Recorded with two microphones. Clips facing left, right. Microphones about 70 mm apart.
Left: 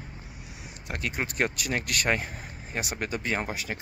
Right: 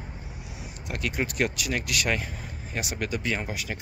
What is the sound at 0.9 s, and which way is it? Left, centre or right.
Speech, left.